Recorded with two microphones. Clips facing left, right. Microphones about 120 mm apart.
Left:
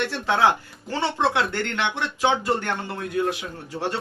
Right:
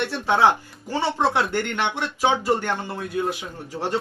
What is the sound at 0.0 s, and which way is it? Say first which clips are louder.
Speech: right 2 dB; 15° right (ahead or behind).